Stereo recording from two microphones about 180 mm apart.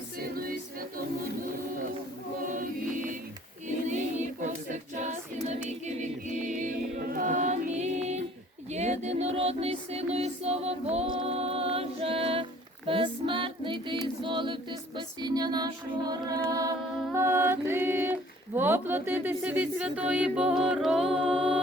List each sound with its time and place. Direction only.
0.2 s music: 55° right (ahead or behind)
3.8 s a capella: 40° right (ahead or behind)
8.7 s music: 40° right (ahead or behind); by 21.6 s 5° right (ahead or behind)